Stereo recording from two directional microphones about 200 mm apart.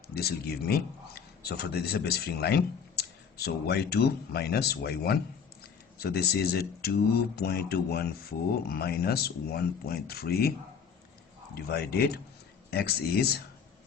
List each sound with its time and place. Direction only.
0.1 s a man's voice: 50° left (ahead or behind)
11.5 s a man's voice: 50° left (ahead or behind)